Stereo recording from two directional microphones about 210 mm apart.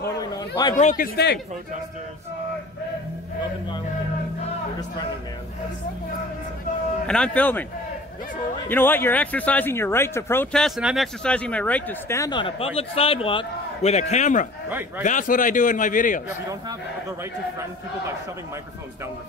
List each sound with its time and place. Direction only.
0.0 s chatter: 15° left (ahead or behind)
0.7 s speech: 40° left (ahead or behind)
7.1 s speech: 5° left (ahead or behind)
8.6 s speech: 10° left (ahead or behind); by 14.5 s 35° left (ahead or behind)
14.7 s speech: 10° right (ahead or behind)
15.0 s a man's voice: 40° left (ahead or behind)